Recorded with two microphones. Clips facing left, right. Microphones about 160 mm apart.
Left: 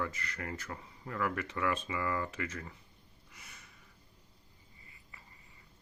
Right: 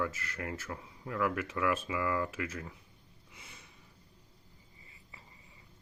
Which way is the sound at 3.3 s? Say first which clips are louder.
Right 2 dB; 25° right (ahead or behind).